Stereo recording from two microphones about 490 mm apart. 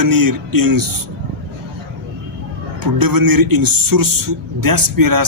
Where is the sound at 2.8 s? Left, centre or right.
Right.